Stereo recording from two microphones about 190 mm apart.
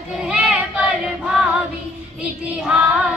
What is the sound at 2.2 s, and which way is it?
Child singing, 5° right (ahead or behind).